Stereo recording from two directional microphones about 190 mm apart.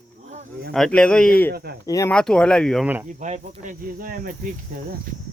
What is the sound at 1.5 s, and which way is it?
Speech, 55° right (ahead or behind).